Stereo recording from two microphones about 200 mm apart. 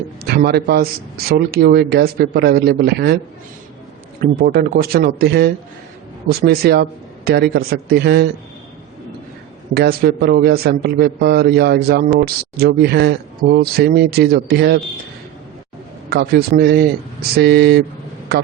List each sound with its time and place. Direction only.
0.3 s a man's voice: 55° right (ahead or behind)
4.2 s a man's voice: 50° right (ahead or behind)
9.7 s a man's voice: 55° right (ahead or behind)
16.0 s a man's voice: 55° right (ahead or behind)